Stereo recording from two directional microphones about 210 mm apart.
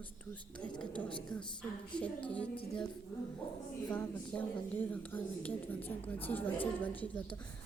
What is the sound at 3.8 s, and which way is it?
A woman's voice, 10° left (ahead or behind).